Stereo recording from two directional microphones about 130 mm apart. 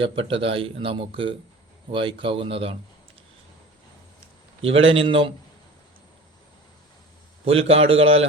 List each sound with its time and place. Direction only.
0.0 s speech: 45° right (ahead or behind)
4.7 s speech: 45° right (ahead or behind)
7.4 s speech: 50° right (ahead or behind)